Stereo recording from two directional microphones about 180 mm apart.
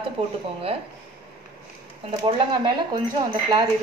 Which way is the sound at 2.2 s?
25° right (ahead or behind).